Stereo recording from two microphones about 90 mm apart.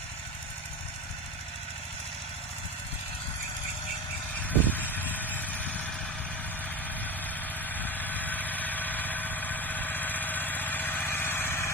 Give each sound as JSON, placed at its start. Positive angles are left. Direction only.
{"t": 4.5, "sound": "vehicle", "side_deg": 20}
{"t": 7.7, "sound": "engine", "side_deg": 20}